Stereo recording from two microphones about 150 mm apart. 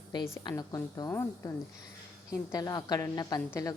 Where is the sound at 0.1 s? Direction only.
30° left (ahead or behind).